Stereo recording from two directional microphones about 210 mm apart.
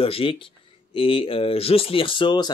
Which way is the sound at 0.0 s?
25° left (ahead or behind).